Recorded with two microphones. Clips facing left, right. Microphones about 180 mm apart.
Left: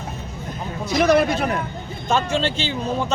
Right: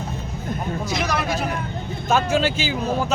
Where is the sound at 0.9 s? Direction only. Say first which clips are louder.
Left 11 dB; 55° left (ahead or behind).